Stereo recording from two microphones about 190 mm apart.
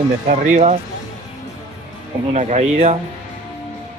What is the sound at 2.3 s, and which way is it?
Speech, 35° right (ahead or behind).